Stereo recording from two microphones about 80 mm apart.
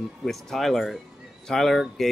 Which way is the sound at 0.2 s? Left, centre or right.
Centre.